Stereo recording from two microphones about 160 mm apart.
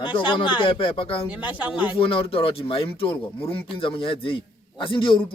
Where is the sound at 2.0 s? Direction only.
35° left (ahead or behind).